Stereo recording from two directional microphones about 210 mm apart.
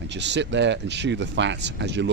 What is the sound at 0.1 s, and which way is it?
Speech, 55° right (ahead or behind).